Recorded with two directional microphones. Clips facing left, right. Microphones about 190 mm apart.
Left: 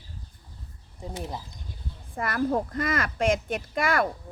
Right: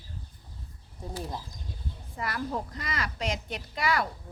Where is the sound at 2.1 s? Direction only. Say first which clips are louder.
Left 7 dB; 50° left (ahead or behind).